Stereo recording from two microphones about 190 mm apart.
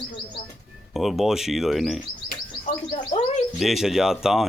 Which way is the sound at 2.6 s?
30° left (ahead or behind).